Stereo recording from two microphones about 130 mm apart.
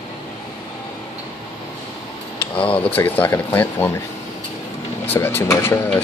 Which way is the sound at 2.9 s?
15° left (ahead or behind).